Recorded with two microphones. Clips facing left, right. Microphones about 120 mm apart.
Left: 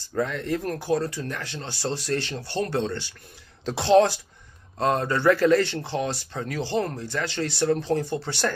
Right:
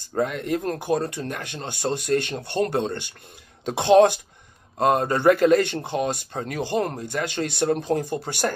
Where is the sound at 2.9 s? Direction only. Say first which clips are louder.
Right 1 dB; 20° right (ahead or behind).